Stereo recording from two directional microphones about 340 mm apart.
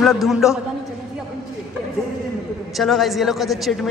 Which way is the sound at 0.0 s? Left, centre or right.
Centre.